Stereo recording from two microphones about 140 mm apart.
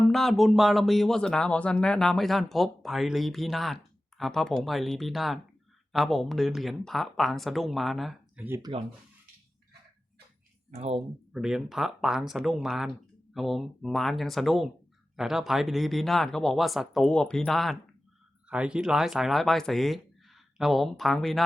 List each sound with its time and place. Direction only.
0.1 s speech: centre (ahead or behind)
8.4 s speech: 15° right (ahead or behind)
10.7 s speech: 45° right (ahead or behind)
11.3 s speech: 5° right (ahead or behind)